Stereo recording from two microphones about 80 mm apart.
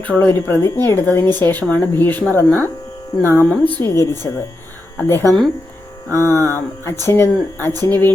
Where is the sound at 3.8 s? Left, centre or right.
Left.